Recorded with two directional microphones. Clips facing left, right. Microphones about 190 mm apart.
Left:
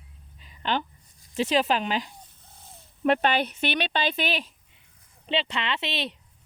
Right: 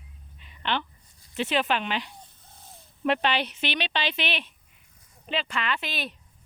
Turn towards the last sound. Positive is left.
turn(degrees=20)  # may be behind; listen again after turning